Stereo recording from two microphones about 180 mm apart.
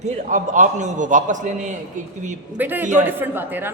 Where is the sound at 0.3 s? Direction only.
45° right (ahead or behind).